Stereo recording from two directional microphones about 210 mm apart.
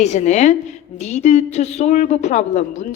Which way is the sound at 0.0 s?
35° left (ahead or behind).